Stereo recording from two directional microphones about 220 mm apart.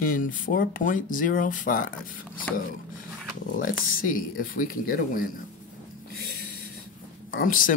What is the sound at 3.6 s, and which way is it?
Speech, 40° left (ahead or behind).